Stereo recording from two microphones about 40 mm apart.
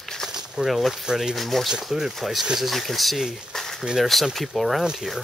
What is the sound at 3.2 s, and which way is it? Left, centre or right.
Speech, centre.